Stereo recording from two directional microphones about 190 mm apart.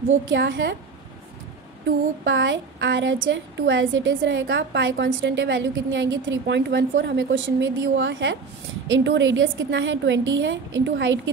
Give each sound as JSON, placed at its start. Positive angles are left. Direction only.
{"t": 0.3, "sound": "a woman's voice", "side_deg": -70}
{"t": 2.2, "sound": "a woman's voice", "side_deg": -75}
{"t": 6.4, "sound": "a woman's voice", "side_deg": -65}